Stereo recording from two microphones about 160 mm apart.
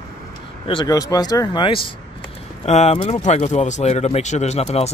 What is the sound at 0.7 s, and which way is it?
Speech, 25° left (ahead or behind).